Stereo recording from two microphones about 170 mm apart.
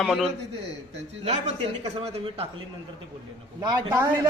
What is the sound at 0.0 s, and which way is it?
Speech, centre (ahead or behind).